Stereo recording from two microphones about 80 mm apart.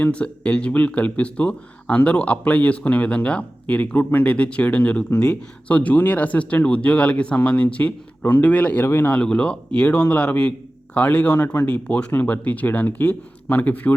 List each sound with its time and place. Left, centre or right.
0.0 s speech: centre